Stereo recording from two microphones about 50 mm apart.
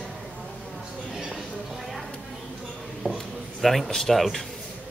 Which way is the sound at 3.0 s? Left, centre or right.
Left.